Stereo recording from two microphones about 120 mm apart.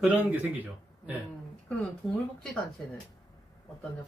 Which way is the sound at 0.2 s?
15° right (ahead or behind).